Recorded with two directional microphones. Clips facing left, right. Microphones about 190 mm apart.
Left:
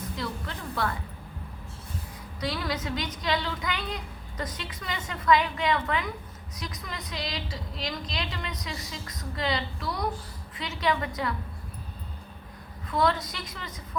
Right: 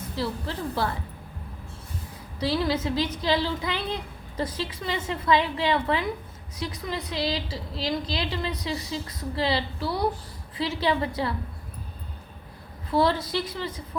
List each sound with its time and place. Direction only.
0.2 s a woman's voice: 30° right (ahead or behind)
2.4 s a woman's voice: 30° right (ahead or behind)
12.9 s a woman's voice: 30° right (ahead or behind)